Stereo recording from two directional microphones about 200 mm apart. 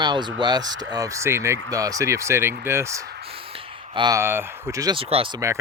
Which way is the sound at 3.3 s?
25° right (ahead or behind).